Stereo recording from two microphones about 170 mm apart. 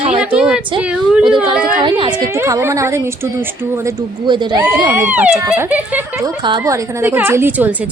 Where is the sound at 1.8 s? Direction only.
25° right (ahead or behind).